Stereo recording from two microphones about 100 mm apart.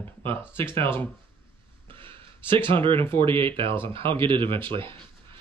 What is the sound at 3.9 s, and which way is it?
Speech, 60° right (ahead or behind).